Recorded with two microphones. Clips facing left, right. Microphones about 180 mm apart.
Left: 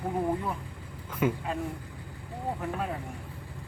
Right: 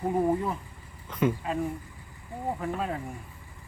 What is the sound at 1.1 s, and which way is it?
Speech, 5° left (ahead or behind).